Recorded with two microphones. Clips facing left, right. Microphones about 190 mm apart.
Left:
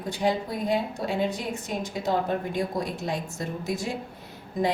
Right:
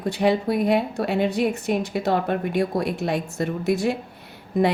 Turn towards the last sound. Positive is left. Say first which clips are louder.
# right 6 dB
turn(degrees=-65)  # may be behind; listen again after turning